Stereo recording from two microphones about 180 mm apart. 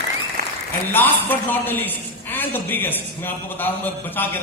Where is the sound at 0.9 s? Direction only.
10° left (ahead or behind).